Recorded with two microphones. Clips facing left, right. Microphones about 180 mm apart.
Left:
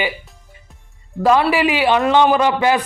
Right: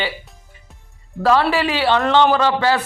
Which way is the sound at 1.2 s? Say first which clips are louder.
Left 2 dB; 15° left (ahead or behind).